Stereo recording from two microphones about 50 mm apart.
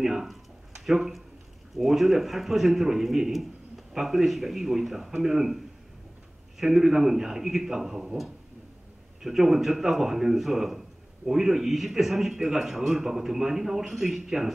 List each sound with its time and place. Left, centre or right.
0.0 s a man's voice: centre
6.6 s a man's voice: centre